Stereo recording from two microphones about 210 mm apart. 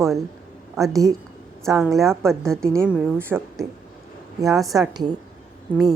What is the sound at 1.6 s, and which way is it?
A woman's voice, centre (ahead or behind).